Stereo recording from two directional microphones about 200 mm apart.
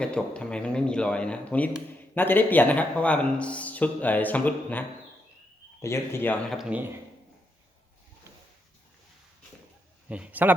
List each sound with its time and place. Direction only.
0.0 s speech: 5° left (ahead or behind)
10.1 s speech: 5° right (ahead or behind)